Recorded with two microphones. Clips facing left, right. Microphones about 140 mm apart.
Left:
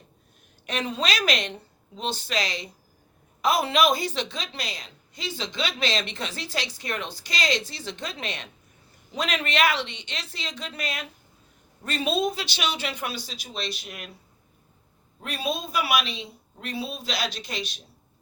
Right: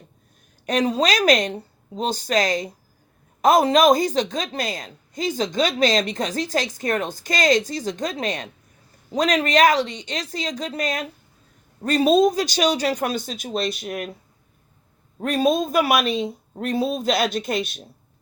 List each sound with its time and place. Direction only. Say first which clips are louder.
0.6 s a woman's voice: right 8 dB; 40° right (ahead or behind)
15.2 s a woman's voice: right 11 dB; 45° right (ahead or behind)